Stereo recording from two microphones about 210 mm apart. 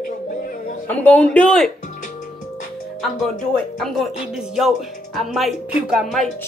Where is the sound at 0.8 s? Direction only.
5° left (ahead or behind).